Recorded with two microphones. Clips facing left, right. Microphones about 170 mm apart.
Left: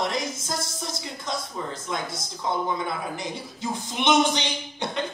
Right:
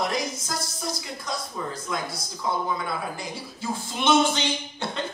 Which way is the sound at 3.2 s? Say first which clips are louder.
Left 1 dB; 20° left (ahead or behind).